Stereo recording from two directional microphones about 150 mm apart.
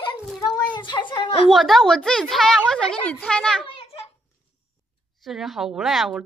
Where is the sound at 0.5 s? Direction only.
30° left (ahead or behind).